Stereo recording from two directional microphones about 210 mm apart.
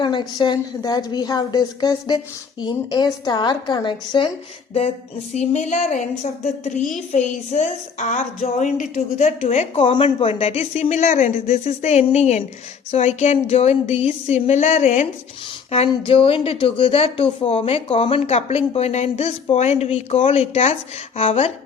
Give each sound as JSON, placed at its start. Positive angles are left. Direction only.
{"t": 0.0, "sound": "a woman's voice", "side_deg": 20}
{"t": 5.3, "sound": "a woman's voice", "side_deg": 35}